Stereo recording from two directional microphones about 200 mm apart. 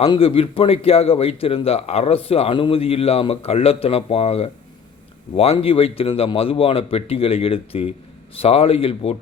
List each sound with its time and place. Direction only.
0.0 s a man's voice: 25° left (ahead or behind)